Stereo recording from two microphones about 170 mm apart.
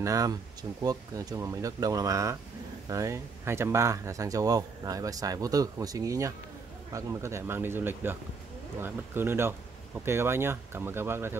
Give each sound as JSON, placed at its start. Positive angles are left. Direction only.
{"t": 0.0, "sound": "speech", "side_deg": -20}